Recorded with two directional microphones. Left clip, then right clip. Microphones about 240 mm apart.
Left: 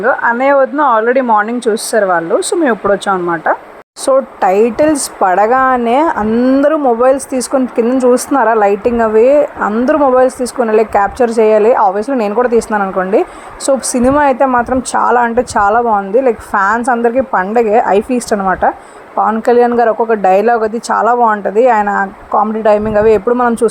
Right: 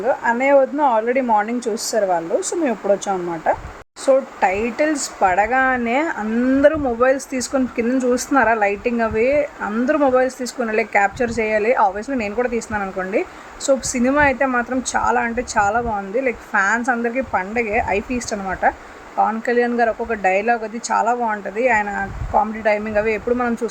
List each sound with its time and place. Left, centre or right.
0.0 s speech: centre
4.0 s speech: left
16.7 s speech: centre
17.3 s speech: left
19.4 s speech: left